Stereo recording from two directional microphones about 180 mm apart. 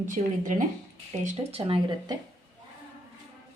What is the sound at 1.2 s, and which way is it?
Speech, 30° right (ahead or behind).